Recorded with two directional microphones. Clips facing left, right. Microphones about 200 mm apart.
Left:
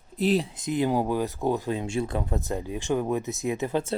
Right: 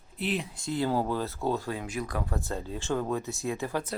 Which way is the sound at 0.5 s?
20° left (ahead or behind).